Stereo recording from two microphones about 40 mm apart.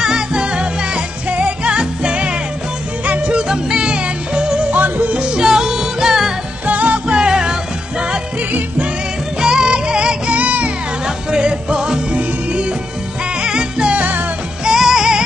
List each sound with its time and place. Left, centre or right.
0.0 s music: centre
4.7 s yodeling: right
5.1 s music: right
6.6 s music: right
7.1 s music: right
9.4 s music: centre
10.3 s music: right
11.2 s music: right
13.4 s music: right
13.9 s music: right
14.6 s music: centre